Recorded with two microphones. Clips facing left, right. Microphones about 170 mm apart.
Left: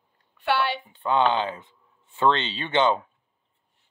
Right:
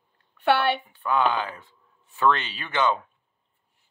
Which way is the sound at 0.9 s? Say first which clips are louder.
Left 2 dB; 25° left (ahead or behind).